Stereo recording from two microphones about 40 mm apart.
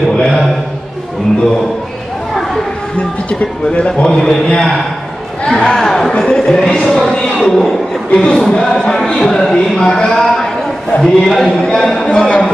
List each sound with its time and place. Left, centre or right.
3.3 s speech: left
4.0 s a man's voice: left
4.3 s speech: centre
6.1 s a man's voice: left
7.4 s speech: centre
8.1 s a man's voice: left
10.2 s a sound: centre
11.0 s speech: centre
11.4 s a man's voice: centre